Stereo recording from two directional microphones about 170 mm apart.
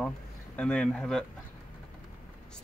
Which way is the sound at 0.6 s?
5° left (ahead or behind).